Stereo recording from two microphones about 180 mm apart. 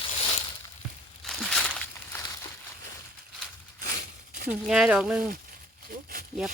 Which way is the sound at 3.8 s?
60° right (ahead or behind).